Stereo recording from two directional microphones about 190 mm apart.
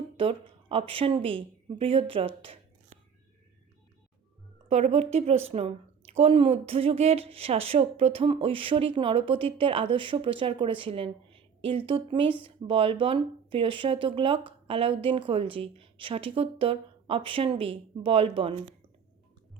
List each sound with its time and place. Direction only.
0.2 s a woman's voice: 30° right (ahead or behind)
4.7 s a woman's voice: 35° right (ahead or behind)